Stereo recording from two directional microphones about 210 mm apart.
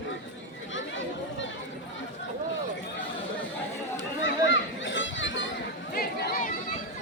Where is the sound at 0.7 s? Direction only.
65° left (ahead or behind).